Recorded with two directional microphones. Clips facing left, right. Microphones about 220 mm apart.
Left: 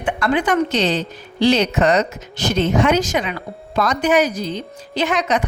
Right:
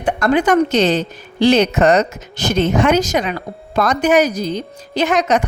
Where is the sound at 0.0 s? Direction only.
40° right (ahead or behind).